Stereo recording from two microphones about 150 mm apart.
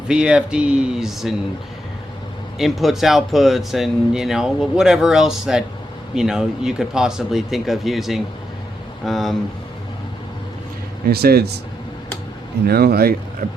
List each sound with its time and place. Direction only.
0.1 s speech: 5° right (ahead or behind)
2.6 s speech: centre (ahead or behind)
11.1 s speech: 90° right
12.6 s speech: 90° right
13.4 s a sound: 60° right (ahead or behind)